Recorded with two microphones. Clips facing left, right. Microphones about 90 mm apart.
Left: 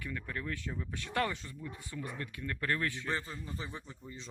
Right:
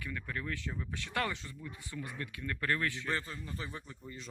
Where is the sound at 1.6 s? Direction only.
30° left (ahead or behind).